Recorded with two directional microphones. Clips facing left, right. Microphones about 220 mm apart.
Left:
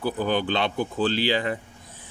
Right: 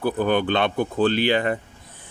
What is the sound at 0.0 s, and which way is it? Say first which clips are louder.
Speech: right 4 dB; 55° right (ahead or behind).